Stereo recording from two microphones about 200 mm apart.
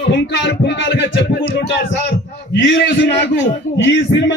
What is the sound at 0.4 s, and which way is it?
Speech, 60° left (ahead or behind).